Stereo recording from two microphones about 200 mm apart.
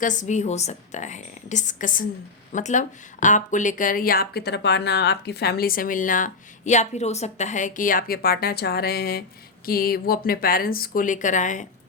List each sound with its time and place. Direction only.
0.0 s a woman's voice: 40° left (ahead or behind)